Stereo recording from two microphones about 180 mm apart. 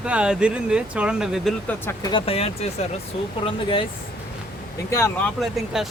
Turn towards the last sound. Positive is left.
turn(degrees=0)  # may be behind; listen again after turning